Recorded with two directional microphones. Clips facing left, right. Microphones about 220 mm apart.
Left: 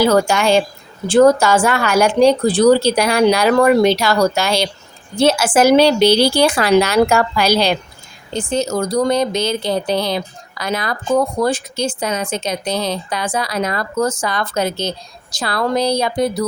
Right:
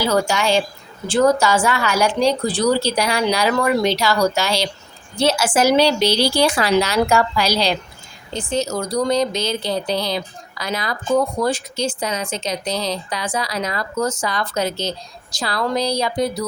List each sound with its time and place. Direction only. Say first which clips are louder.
0.0 s a woman's voice: left 5 dB; 55° left (ahead or behind)